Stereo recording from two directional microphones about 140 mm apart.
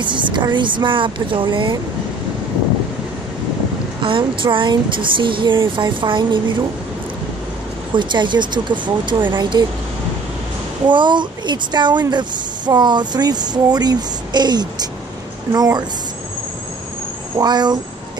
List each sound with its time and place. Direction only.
0.0 s speech: 35° right (ahead or behind)
4.0 s speech: 35° right (ahead or behind)
7.9 s speech: 35° right (ahead or behind)
10.9 s a woman's voice: 35° right (ahead or behind)
17.4 s speech: 30° right (ahead or behind)